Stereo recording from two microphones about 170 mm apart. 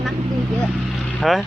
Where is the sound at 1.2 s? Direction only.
Centre (ahead or behind).